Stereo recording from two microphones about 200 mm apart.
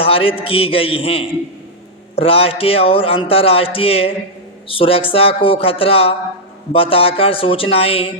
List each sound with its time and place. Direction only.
0.0 s speech: 25° left (ahead or behind)